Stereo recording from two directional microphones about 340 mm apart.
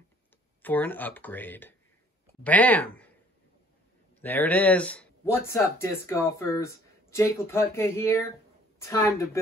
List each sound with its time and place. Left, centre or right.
0.6 s speech: centre
4.2 s speech: centre